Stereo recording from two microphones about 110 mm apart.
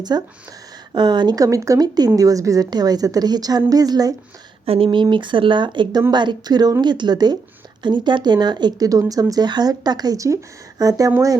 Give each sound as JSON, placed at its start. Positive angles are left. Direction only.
{"t": 0.1, "sound": "speech", "side_deg": -40}
{"t": 4.6, "sound": "speech", "side_deg": -60}